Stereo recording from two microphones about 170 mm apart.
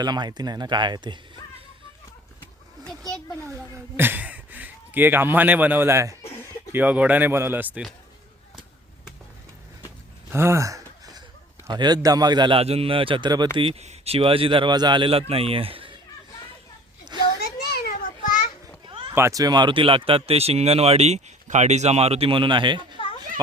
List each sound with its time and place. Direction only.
0.0 s a man's voice: 25° right (ahead or behind)
3.9 s speech: 10° right (ahead or behind)
10.3 s a sound: 15° right (ahead or behind)
11.7 s a man's voice: 25° right (ahead or behind)
17.4 s children playing: 70° left (ahead or behind)
19.1 s speech: 20° right (ahead or behind)